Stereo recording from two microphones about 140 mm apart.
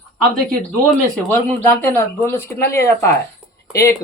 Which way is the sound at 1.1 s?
10° left (ahead or behind).